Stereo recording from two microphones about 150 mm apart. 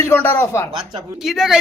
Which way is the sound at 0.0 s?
15° left (ahead or behind).